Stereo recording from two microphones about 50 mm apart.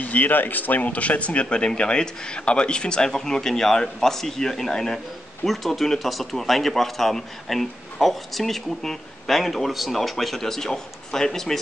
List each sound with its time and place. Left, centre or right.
0.0 s speech: left; by 11.6 s centre